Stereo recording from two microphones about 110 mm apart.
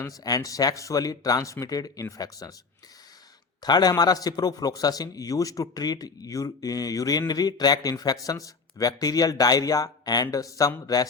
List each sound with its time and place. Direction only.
0.0 s a man's voice: 35° left (ahead or behind)
3.6 s a man's voice: 40° left (ahead or behind)